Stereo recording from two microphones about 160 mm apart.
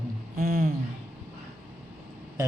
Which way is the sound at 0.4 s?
70° right (ahead or behind).